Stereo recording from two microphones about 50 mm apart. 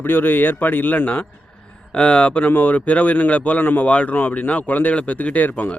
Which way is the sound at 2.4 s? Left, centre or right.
Left.